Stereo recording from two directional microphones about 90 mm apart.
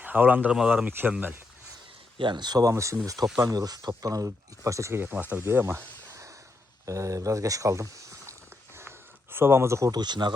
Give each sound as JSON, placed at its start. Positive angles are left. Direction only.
{"t": 0.0, "sound": "speech", "side_deg": -20}
{"t": 0.5, "sound": "speech", "side_deg": -5}
{"t": 0.9, "sound": "speech", "side_deg": -20}
{"t": 2.1, "sound": "speech", "side_deg": -60}
{"t": 6.8, "sound": "a sound", "side_deg": -35}
{"t": 9.3, "sound": "speech", "side_deg": -25}
{"t": 9.9, "sound": "speech", "side_deg": -55}